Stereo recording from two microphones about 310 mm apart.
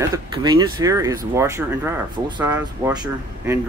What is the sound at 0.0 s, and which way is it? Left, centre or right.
Speech, centre.